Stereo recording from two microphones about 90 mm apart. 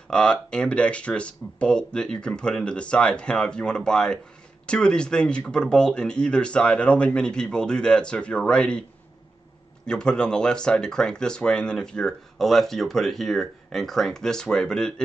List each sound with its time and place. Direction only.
0.1 s speech: 10° left (ahead or behind)
9.8 s speech: 10° left (ahead or behind)